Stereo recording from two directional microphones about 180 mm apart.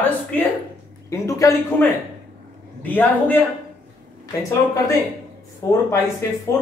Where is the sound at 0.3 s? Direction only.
10° left (ahead or behind).